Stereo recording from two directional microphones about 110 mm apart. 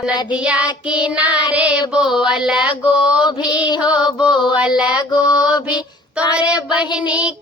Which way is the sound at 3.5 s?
40° left (ahead or behind).